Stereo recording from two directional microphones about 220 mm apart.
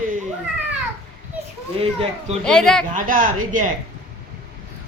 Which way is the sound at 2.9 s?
35° right (ahead or behind).